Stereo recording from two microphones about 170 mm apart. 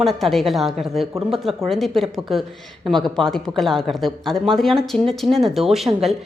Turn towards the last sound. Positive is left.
turn(degrees=0)  # may be behind; listen again after turning